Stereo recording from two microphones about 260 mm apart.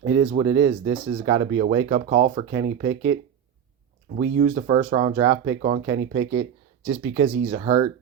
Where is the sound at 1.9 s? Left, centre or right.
Right.